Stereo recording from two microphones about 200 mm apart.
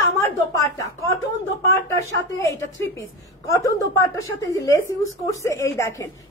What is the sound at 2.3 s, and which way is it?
A woman's voice, 15° left (ahead or behind).